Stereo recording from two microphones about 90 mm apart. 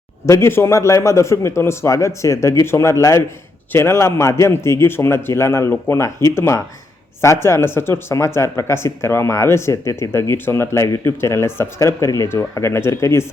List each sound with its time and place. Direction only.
0.3 s a man's voice: 30° left (ahead or behind)